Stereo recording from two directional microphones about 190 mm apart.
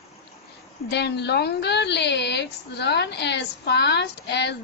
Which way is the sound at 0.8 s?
65° left (ahead or behind).